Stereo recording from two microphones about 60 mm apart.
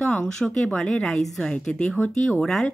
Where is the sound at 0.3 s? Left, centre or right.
Centre.